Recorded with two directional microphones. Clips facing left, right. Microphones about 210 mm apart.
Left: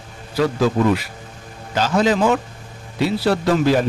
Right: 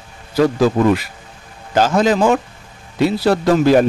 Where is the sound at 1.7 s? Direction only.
45° right (ahead or behind).